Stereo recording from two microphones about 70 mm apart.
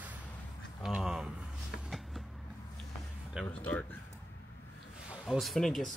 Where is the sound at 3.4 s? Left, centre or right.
Left.